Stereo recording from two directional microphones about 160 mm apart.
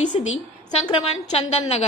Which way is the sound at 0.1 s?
35° left (ahead or behind).